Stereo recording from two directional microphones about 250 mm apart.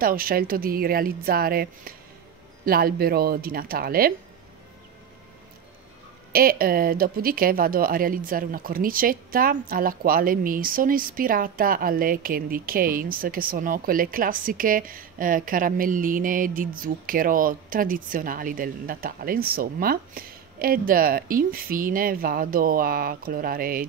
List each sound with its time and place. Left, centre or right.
0.0 s speech: right
6.3 s speech: right